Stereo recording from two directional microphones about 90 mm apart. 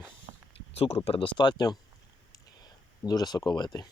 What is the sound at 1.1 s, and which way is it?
Speech, 75° left (ahead or behind).